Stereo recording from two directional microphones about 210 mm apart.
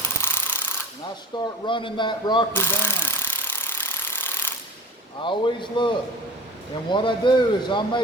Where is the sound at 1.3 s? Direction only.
20° left (ahead or behind).